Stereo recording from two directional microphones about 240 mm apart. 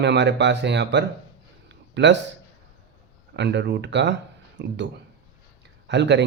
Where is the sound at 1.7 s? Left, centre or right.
Right.